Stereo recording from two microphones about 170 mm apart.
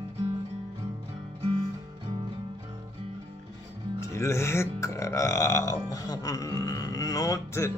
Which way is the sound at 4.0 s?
15° left (ahead or behind).